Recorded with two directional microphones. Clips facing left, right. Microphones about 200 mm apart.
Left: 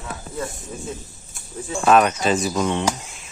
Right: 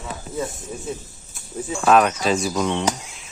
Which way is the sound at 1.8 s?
Centre (ahead or behind).